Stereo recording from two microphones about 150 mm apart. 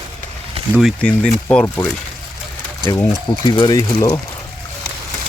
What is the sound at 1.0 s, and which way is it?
Speech, 10° left (ahead or behind).